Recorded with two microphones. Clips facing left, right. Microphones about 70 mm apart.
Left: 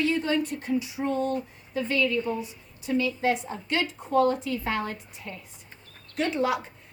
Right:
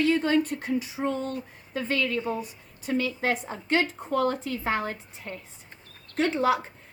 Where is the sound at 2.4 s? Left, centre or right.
Right.